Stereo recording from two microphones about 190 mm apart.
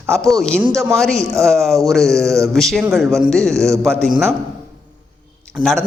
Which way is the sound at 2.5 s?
Centre (ahead or behind).